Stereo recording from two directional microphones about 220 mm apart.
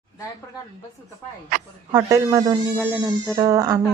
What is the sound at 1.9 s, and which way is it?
Speech, 15° right (ahead or behind).